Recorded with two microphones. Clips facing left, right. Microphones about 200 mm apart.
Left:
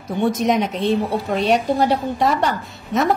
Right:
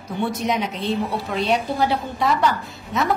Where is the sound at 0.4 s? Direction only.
45° left (ahead or behind).